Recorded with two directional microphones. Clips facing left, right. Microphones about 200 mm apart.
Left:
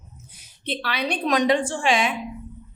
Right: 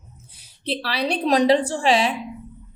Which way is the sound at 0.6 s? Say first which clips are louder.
Right 3 dB; 35° right (ahead or behind).